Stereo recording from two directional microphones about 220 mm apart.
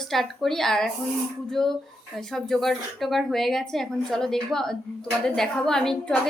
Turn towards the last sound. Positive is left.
turn(degrees=5)  # may be behind; listen again after turning